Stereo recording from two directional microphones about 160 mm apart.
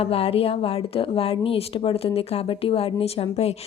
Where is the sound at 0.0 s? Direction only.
35° left (ahead or behind).